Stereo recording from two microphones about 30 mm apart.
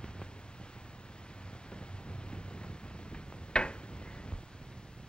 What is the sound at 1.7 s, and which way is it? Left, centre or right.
Wind noise, left.